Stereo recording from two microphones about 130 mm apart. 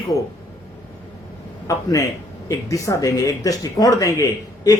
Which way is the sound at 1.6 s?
25° left (ahead or behind).